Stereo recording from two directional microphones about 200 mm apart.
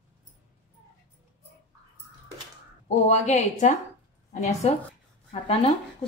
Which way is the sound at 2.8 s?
35° left (ahead or behind).